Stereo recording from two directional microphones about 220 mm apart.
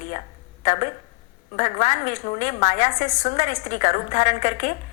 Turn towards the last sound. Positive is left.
turn(degrees=35)  # may be behind; listen again after turning